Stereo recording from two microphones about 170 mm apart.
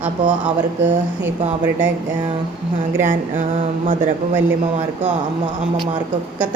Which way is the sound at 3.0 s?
50° right (ahead or behind).